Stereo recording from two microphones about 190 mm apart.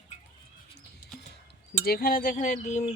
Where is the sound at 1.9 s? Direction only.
50° left (ahead or behind).